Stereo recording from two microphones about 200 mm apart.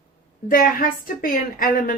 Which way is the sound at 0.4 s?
45° left (ahead or behind).